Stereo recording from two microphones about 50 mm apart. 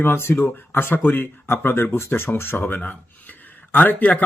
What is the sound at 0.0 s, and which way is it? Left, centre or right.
A man's voice, left.